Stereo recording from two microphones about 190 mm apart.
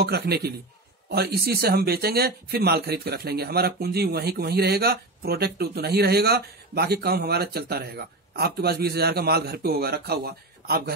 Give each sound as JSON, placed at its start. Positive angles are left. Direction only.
{"t": 0.0, "sound": "speech", "side_deg": -60}